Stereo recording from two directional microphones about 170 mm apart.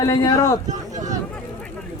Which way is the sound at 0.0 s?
20° left (ahead or behind).